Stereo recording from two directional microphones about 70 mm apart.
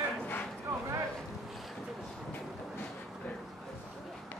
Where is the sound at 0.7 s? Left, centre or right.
Right.